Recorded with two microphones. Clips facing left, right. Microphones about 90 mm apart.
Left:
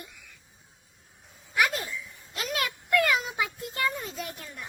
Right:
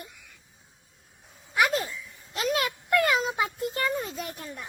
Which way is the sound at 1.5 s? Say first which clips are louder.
Right 2 dB; 30° right (ahead or behind).